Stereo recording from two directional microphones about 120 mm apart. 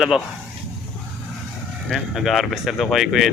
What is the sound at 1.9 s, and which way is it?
Speech, centre (ahead or behind).